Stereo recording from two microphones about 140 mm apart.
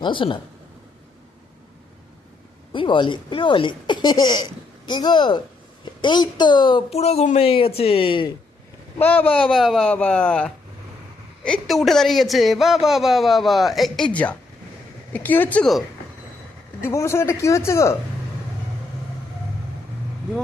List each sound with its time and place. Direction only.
0.0 s a woman's voice: 35° left (ahead or behind)
2.7 s a woman's voice: 35° left (ahead or behind)
9.0 s a man's voice: 10° left (ahead or behind)
16.8 s a man's voice: 20° left (ahead or behind)